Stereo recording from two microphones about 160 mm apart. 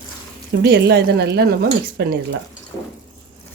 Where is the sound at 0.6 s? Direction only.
90° right.